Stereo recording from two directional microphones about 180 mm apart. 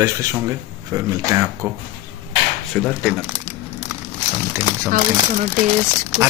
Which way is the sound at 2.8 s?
5° left (ahead or behind).